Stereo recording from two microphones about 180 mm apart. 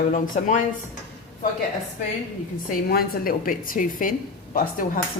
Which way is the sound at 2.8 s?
55° left (ahead or behind).